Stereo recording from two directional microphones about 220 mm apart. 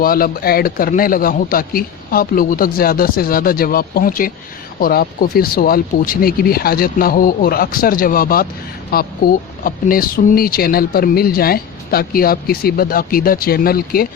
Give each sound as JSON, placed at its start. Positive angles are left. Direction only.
{"t": 0.0, "sound": "a man's voice", "side_deg": 40}